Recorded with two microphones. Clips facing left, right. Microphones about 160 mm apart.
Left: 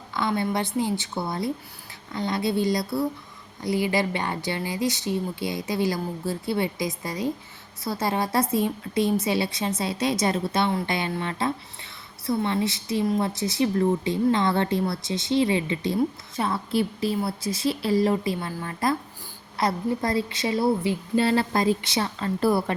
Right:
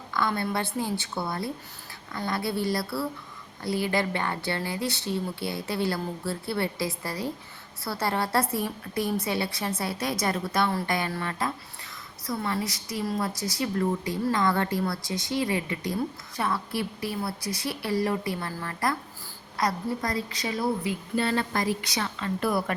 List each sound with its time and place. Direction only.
0.1 s a woman's voice: 20° left (ahead or behind)